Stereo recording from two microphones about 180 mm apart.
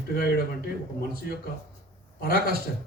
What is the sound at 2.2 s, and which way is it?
Speech, 55° left (ahead or behind).